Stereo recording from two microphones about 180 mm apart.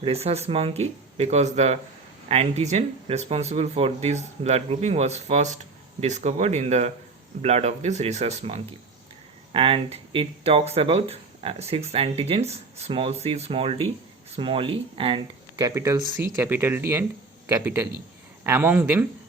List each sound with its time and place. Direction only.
0.0 s speech: 35° right (ahead or behind); by 19.0 s 10° right (ahead or behind)